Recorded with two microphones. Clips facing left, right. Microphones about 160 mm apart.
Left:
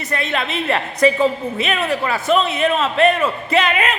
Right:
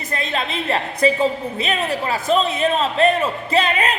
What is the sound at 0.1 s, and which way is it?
A man's voice, 35° right (ahead or behind).